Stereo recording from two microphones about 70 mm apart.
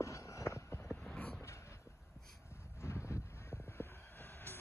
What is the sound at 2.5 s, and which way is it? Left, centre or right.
Vehicle, left.